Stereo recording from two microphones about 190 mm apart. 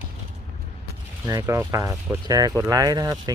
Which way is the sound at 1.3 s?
15° right (ahead or behind).